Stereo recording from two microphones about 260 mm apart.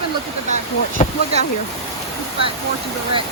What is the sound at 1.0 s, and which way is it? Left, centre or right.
Speech, left.